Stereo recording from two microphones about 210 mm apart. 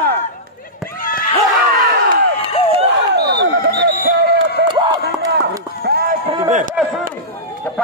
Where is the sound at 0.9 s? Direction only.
45° left (ahead or behind).